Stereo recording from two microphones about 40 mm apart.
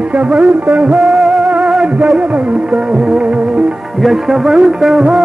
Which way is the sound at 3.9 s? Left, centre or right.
Centre.